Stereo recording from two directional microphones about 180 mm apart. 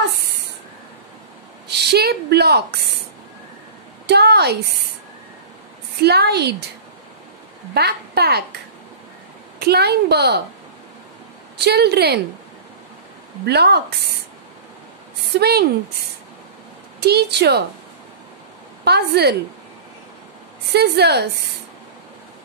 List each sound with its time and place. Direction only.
1.7 s a woman's voice: 65° right (ahead or behind)
4.1 s a woman's voice: 65° right (ahead or behind)
5.9 s a child's voice: 65° right (ahead or behind)
7.7 s a child's voice: 65° right (ahead or behind)
9.6 s a child's voice: 65° right (ahead or behind)
11.5 s a child's voice: 65° right (ahead or behind)
13.5 s a child's voice: 65° right (ahead or behind)
15.3 s a child's voice: 65° right (ahead or behind)
17.0 s a child's voice: 65° right (ahead or behind)
18.9 s a child's voice: 65° right (ahead or behind)
20.7 s a child's voice: 65° right (ahead or behind)